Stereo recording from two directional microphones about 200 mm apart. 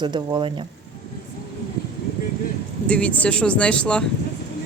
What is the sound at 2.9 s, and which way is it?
Speech, 5° left (ahead or behind).